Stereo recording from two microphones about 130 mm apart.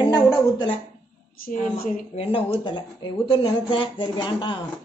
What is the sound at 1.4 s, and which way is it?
Speech, 90° left.